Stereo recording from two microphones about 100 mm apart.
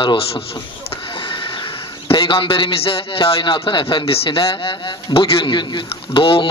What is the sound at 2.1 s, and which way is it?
A man's voice, 65° left (ahead or behind).